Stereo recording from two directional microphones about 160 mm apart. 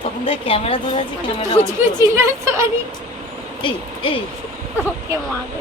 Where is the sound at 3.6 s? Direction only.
30° left (ahead or behind).